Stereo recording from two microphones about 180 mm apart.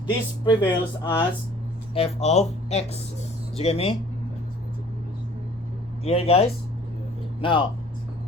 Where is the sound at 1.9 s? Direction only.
35° left (ahead or behind).